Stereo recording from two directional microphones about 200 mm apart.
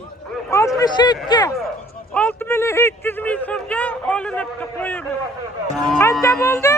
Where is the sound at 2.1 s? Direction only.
5° left (ahead or behind).